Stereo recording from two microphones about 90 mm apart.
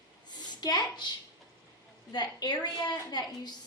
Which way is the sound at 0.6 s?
50° left (ahead or behind).